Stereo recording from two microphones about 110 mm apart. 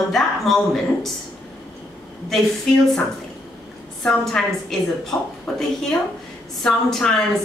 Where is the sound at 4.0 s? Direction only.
5° left (ahead or behind).